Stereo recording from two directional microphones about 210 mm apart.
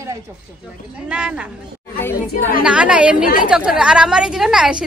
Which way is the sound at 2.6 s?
5° right (ahead or behind).